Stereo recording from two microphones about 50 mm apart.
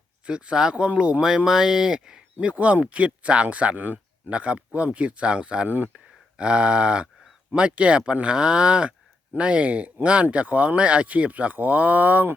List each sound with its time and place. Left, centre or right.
0.3 s speech: centre
4.3 s speech: right
5.6 s speech: right
5.9 s speech: centre; by 12.3 s right